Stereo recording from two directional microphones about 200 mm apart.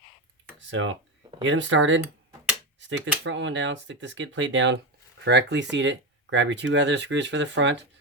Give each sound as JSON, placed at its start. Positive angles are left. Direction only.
{"t": 0.7, "sound": "speech", "side_deg": -70}
{"t": 3.2, "sound": "speech", "side_deg": -65}